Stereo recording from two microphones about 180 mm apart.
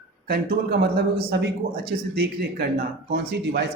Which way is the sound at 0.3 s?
60° right (ahead or behind).